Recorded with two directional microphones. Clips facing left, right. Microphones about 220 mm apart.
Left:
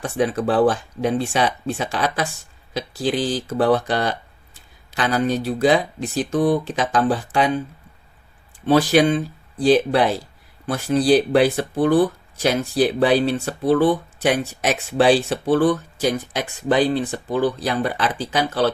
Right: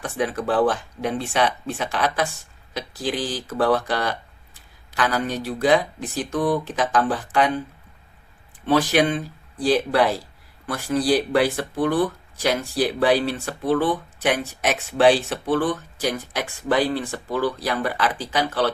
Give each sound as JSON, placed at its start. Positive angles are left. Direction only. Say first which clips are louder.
{"t": 0.0, "sound": "speech", "louder": "left 4 dB", "side_deg": 30}
{"t": 8.6, "sound": "speech", "louder": "left 4 dB", "side_deg": 30}